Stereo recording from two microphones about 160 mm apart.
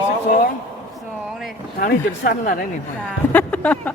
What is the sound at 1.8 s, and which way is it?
Speech, 70° left (ahead or behind).